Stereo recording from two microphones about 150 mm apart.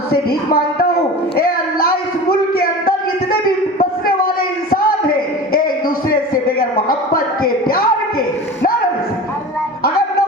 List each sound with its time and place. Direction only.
0.1 s speech: 90° left
2.5 s music: 90° left
3.8 s a sound: 80° left